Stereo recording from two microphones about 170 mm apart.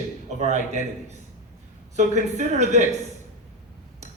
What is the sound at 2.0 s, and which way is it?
Speech, 45° right (ahead or behind).